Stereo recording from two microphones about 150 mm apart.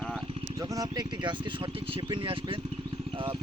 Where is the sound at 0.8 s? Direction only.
30° right (ahead or behind).